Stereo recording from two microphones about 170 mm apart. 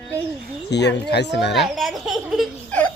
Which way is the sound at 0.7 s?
85° left.